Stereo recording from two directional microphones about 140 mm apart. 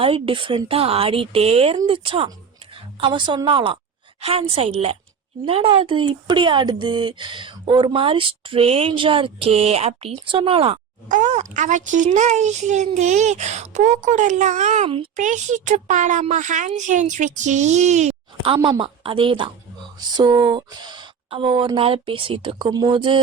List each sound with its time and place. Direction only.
0.0 s a woman's voice: 40° right (ahead or behind)
11.1 s a child's voice: 60° right (ahead or behind)
14.8 s speech: 40° right (ahead or behind)
15.1 s a child's voice: 60° right (ahead or behind)
18.4 s speech: 35° right (ahead or behind)